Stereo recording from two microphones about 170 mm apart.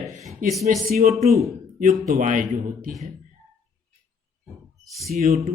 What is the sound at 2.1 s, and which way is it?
Speech, 50° right (ahead or behind).